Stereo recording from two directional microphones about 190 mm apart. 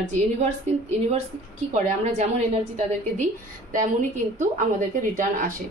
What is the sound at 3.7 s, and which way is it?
A woman's voice, 40° right (ahead or behind).